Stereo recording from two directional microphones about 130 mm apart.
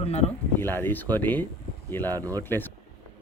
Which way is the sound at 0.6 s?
15° left (ahead or behind).